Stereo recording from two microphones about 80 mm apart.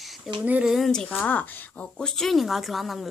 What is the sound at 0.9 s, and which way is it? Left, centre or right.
Speech, centre.